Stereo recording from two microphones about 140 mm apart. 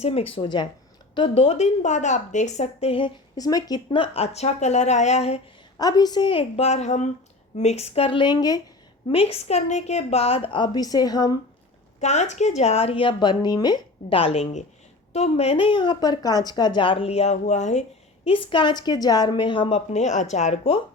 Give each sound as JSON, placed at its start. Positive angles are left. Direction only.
{"t": 0.0, "sound": "speech", "side_deg": 45}
{"t": 3.3, "sound": "speech", "side_deg": 25}
{"t": 5.8, "sound": "speech", "side_deg": 30}
{"t": 9.0, "sound": "speech", "side_deg": 45}
{"t": 11.9, "sound": "speech", "side_deg": 55}
{"t": 18.3, "sound": "speech", "side_deg": 35}